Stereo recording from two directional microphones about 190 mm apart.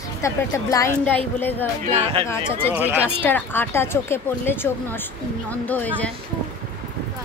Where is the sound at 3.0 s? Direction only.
10° left (ahead or behind).